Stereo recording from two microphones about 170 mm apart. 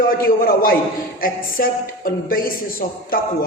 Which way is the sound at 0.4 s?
60° left (ahead or behind).